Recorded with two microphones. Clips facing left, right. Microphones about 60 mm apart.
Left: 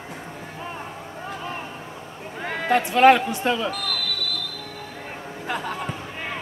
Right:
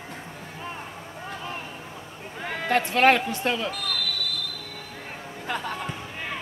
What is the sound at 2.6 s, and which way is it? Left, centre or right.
Speech, left.